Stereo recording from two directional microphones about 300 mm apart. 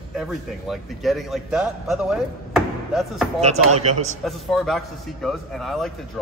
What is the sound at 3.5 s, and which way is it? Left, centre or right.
Speech, right.